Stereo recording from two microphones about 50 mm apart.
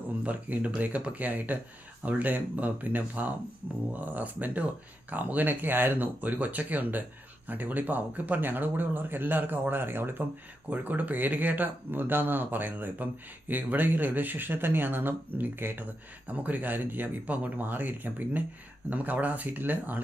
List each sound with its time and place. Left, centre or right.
0.2 s speech: right
10.7 s speech: right